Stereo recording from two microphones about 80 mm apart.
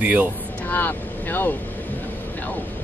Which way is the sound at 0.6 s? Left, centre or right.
Left.